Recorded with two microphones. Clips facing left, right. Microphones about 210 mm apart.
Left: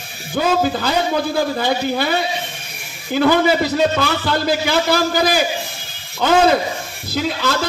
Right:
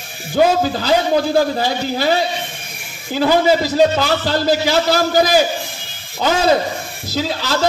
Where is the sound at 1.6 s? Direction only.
55° left (ahead or behind).